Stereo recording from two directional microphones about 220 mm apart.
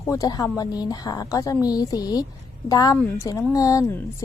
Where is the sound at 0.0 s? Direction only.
15° left (ahead or behind).